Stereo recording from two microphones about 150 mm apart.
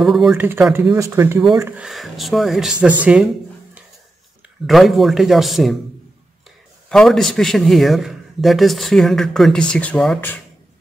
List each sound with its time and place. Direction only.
0.0 s a man's voice: centre (ahead or behind)
0.4 s speech: 15° right (ahead or behind)
1.8 s a man's voice: centre (ahead or behind)
4.6 s a man's voice: centre (ahead or behind)
6.9 s a man's voice: 5° left (ahead or behind)